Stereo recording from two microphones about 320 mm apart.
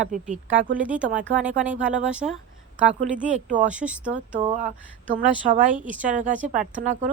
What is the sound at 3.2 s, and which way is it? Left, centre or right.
Speech, right.